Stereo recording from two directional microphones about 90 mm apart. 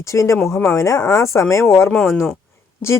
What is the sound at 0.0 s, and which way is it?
Speech, 35° left (ahead or behind).